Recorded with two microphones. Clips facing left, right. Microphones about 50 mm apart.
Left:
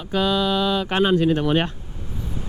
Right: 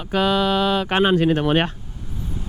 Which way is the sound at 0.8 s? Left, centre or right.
Right.